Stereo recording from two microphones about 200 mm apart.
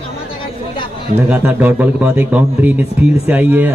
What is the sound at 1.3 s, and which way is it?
A man's voice, 10° right (ahead or behind).